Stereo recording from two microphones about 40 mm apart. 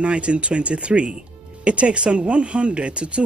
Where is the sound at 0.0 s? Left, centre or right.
Right.